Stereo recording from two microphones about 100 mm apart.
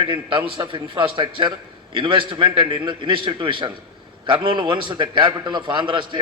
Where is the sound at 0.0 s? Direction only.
55° right (ahead or behind).